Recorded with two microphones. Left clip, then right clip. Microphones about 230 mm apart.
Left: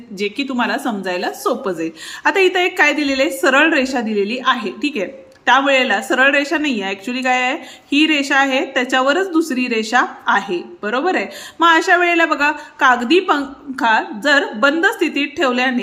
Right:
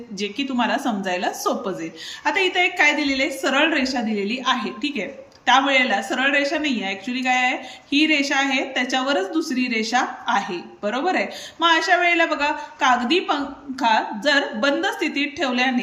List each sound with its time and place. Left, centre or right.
0.2 s speech: centre